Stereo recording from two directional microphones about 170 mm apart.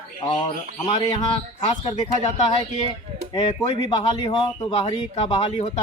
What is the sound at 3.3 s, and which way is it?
Speech, 35° left (ahead or behind).